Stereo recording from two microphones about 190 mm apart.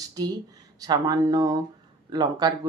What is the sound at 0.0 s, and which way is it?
Speech, 20° right (ahead or behind).